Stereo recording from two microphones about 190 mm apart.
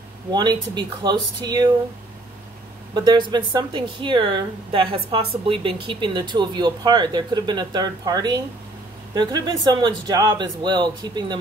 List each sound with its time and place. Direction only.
0.3 s a woman's voice: 20° right (ahead or behind)
2.9 s a woman's voice: 20° right (ahead or behind)